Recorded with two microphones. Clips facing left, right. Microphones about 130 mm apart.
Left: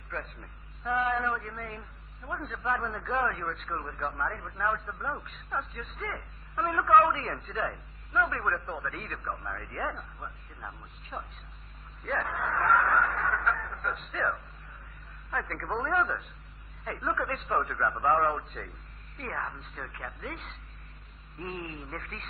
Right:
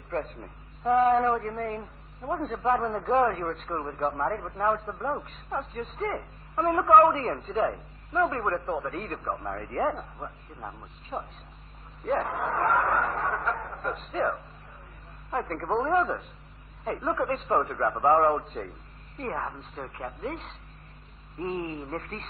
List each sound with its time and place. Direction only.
0.1 s a man's voice: 40° right (ahead or behind)